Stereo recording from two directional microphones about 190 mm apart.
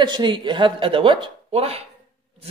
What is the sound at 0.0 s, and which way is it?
Speech, 25° right (ahead or behind).